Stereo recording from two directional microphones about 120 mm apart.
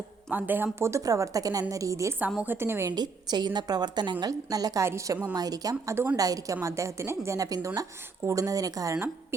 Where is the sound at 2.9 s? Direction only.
35° right (ahead or behind).